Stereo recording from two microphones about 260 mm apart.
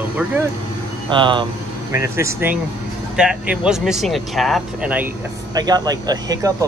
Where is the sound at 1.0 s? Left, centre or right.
Centre.